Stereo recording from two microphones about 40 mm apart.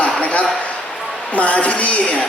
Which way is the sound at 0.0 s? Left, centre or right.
Left.